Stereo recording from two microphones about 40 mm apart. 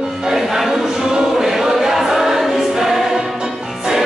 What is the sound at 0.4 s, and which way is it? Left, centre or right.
Choir, centre.